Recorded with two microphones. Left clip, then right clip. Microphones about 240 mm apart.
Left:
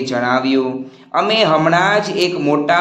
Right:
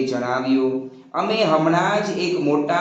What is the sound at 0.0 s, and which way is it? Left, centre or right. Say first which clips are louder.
A man's voice: left 6 dB; left.